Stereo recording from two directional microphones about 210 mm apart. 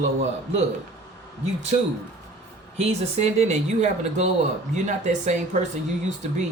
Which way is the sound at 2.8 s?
30° right (ahead or behind).